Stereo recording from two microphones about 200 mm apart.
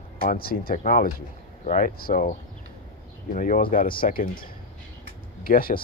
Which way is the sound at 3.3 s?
40° left (ahead or behind).